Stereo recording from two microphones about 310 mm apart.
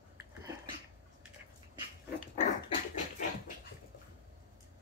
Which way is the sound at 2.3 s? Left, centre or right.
Left.